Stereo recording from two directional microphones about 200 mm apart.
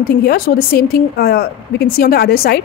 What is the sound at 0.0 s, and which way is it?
A woman's voice, 50° left (ahead or behind).